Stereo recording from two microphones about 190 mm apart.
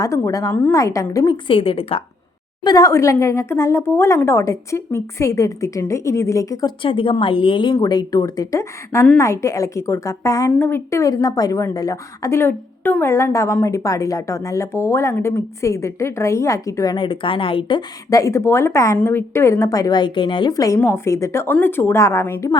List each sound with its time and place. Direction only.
0.0 s a woman's voice: 20° left (ahead or behind)
2.6 s a woman's voice: 20° left (ahead or behind)